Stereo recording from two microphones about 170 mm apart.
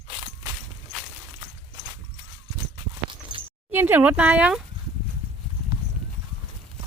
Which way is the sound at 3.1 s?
30° right (ahead or behind).